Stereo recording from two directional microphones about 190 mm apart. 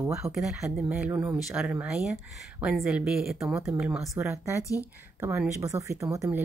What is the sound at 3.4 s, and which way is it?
Speech, 15° right (ahead or behind).